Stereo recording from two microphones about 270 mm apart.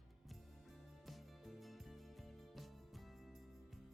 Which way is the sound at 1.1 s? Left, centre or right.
Centre.